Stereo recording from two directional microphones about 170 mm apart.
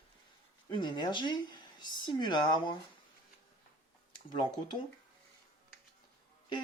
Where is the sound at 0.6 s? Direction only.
25° left (ahead or behind).